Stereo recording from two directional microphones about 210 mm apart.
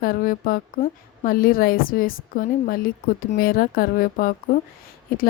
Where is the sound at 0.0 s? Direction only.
40° left (ahead or behind).